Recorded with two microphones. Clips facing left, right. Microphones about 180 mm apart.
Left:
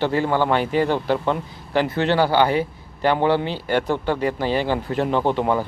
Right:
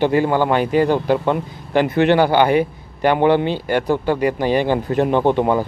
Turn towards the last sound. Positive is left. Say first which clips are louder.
# right 4 dB
turn(degrees=-15)  # may be behind; listen again after turning